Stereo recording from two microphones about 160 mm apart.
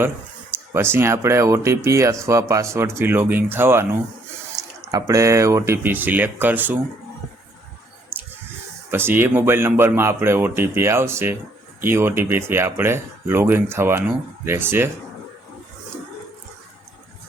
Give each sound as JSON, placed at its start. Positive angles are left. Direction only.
{"t": 0.5, "sound": "speech", "side_deg": -15}
{"t": 8.9, "sound": "speech", "side_deg": -15}